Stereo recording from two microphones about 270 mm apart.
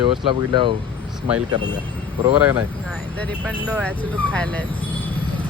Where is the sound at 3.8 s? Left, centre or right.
Centre.